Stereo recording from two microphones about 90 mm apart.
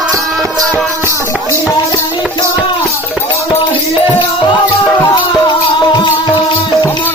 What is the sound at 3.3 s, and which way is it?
Speech, 35° left (ahead or behind).